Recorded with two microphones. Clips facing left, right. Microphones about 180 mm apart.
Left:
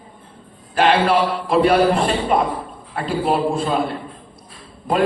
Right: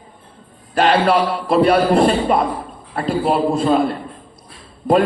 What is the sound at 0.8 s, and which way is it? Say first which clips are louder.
A man's voice: right 1 dB; 40° right (ahead or behind).